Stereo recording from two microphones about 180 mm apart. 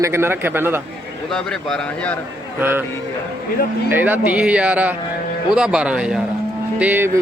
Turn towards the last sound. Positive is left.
turn(degrees=-10)  # may be behind; listen again after turning